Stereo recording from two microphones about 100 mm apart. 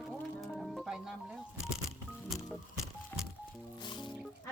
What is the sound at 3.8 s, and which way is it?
Speech, 50° left (ahead or behind).